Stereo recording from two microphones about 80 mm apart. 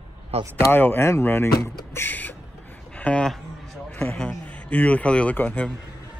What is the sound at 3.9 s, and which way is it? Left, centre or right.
Speech, centre.